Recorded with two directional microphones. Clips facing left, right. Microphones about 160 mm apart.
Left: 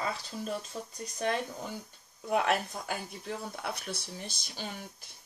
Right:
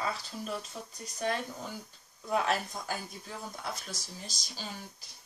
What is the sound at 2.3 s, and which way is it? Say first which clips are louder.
Speech: left 2 dB; 65° left (ahead or behind).